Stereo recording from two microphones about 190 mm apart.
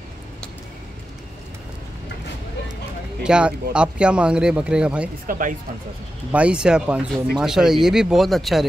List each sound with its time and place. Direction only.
3.3 s speech: 5° right (ahead or behind)
5.2 s speech: 45° right (ahead or behind)
6.3 s speech: 5° right (ahead or behind)